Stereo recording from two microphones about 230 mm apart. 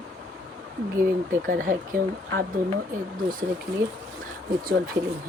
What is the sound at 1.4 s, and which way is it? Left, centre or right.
Speech, right.